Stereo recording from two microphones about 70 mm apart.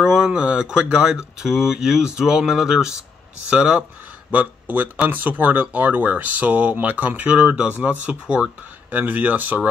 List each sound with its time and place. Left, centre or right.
0.0 s speech: centre
4.3 s speech: right